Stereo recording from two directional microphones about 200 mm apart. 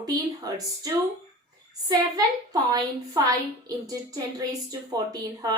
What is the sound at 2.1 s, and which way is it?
A woman's voice, 20° right (ahead or behind).